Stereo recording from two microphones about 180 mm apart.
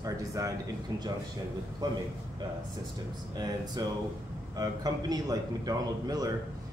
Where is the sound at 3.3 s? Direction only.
20° right (ahead or behind).